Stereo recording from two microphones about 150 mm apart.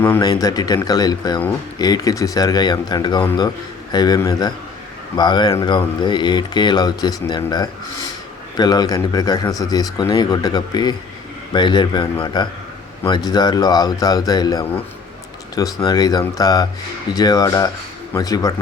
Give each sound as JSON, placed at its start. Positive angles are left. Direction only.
{"t": 0.2, "sound": "a man's voice", "side_deg": 25}